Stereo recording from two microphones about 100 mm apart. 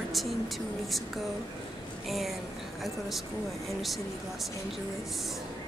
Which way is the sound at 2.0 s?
Centre (ahead or behind).